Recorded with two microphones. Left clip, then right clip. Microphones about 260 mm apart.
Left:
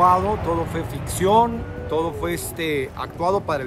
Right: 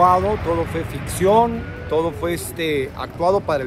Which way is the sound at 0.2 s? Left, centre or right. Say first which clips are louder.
Right 2 dB; left.